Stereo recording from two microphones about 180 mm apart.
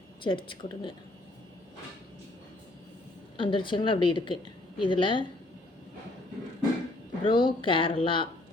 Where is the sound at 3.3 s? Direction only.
30° left (ahead or behind).